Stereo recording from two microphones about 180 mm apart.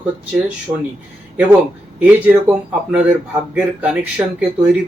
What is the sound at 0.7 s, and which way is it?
Speech, 25° right (ahead or behind).